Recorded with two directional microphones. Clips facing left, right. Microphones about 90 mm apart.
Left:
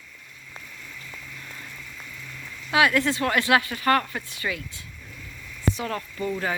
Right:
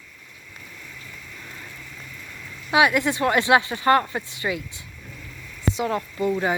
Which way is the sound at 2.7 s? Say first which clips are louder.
Right 2 dB; 20° right (ahead or behind).